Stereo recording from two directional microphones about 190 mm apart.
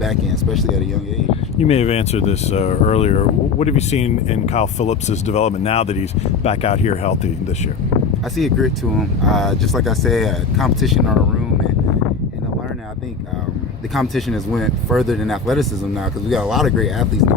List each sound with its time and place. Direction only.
0.0 s speech: centre (ahead or behind)
1.5 s speech: 35° left (ahead or behind)
8.4 s speech: centre (ahead or behind)
13.9 s speech: centre (ahead or behind)